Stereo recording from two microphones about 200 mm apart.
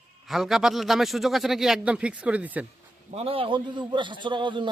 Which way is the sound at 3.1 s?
30° right (ahead or behind).